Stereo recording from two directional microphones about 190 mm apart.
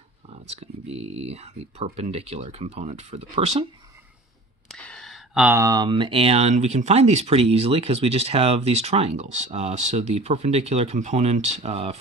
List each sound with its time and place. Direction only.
0.3 s speech: 35° right (ahead or behind)
4.6 s speech: 5° left (ahead or behind); by 12.0 s 35° right (ahead or behind)